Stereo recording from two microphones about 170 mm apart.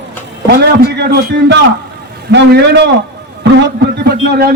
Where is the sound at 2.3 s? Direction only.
90° right.